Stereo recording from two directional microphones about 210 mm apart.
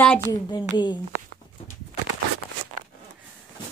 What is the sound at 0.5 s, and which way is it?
Speech, 20° left (ahead or behind).